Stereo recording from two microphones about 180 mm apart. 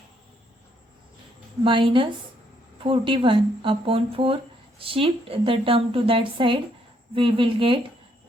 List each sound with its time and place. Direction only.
1.6 s a woman's voice: 30° right (ahead or behind)